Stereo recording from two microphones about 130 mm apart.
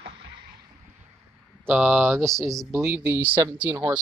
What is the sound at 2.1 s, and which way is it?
Speech, 5° left (ahead or behind).